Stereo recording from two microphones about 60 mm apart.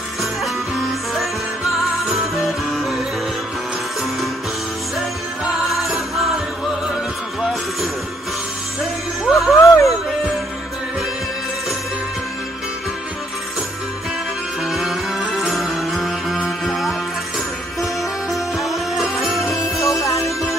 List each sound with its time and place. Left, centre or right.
0.2 s music: centre
5.4 s music: centre
9.2 s music: centre
14.6 s music: centre
18.3 s music: centre
19.8 s music: left